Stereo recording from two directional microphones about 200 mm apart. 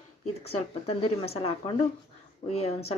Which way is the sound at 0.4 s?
30° left (ahead or behind).